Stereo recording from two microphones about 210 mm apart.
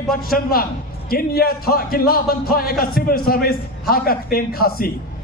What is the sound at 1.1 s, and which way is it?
A man's voice, 45° left (ahead or behind).